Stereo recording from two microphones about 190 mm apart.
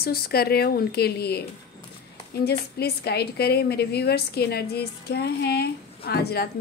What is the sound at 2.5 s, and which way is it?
A woman's voice, 60° left (ahead or behind).